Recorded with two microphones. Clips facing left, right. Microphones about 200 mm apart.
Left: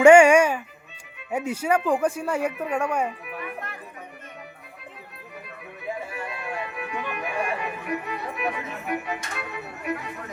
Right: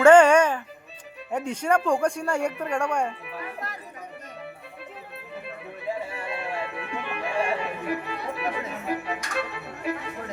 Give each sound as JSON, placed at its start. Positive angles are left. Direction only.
{"t": 0.0, "sound": "music", "side_deg": 10}
{"t": 1.3, "sound": "speech", "side_deg": 10}
{"t": 5.5, "sound": "music", "side_deg": -30}